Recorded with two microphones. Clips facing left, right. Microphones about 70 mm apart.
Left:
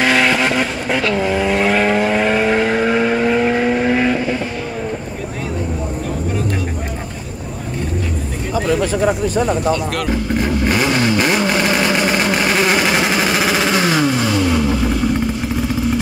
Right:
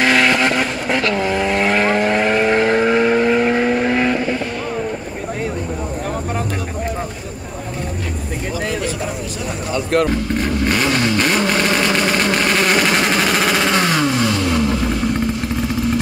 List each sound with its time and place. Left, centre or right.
0.0 s vehicle: centre
9.0 s a sound: left
10.0 s vehicle: centre